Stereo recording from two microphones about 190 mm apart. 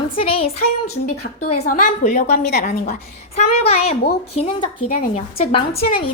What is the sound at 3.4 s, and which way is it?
A woman's voice, 30° left (ahead or behind).